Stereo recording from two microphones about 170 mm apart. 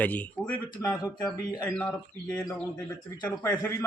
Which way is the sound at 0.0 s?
10° left (ahead or behind).